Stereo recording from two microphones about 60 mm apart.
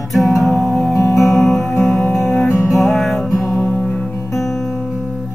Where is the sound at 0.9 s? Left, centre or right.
Left.